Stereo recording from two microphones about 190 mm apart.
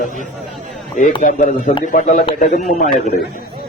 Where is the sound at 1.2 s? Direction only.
45° left (ahead or behind).